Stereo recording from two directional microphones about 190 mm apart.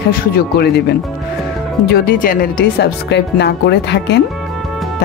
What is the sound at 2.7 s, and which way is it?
Speech, 65° left (ahead or behind).